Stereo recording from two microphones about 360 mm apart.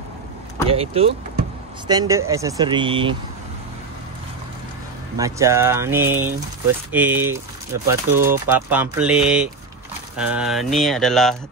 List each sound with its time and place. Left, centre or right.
0.7 s speech: centre
5.1 s speech: centre